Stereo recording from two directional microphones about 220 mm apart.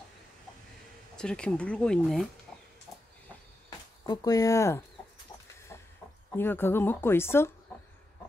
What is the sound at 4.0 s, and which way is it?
Speech, 15° left (ahead or behind).